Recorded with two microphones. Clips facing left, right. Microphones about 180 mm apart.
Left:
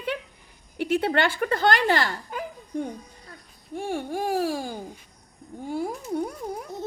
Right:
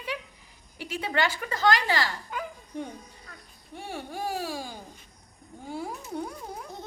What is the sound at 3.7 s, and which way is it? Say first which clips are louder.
A woman's voice: left 8 dB; 50° left (ahead or behind).